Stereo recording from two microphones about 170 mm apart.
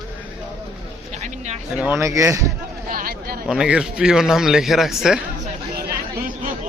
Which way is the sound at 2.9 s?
60° right (ahead or behind).